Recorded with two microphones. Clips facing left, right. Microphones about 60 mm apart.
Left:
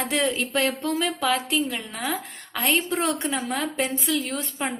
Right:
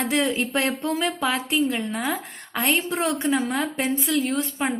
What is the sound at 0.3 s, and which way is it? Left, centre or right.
Speech, right.